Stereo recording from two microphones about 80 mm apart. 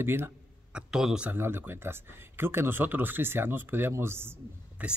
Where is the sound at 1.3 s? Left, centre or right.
Right.